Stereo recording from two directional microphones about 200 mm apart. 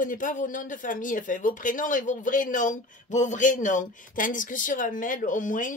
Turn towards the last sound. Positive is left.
turn(degrees=40)  # may be behind; listen again after turning